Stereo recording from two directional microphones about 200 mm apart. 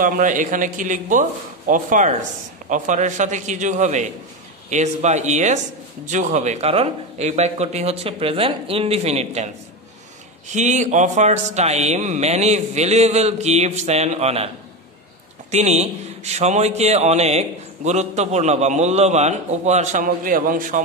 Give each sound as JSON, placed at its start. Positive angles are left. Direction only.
{"t": 0.0, "sound": "a man's voice", "side_deg": -40}
{"t": 10.5, "sound": "a man's voice", "side_deg": -35}
{"t": 15.5, "sound": "a man's voice", "side_deg": -35}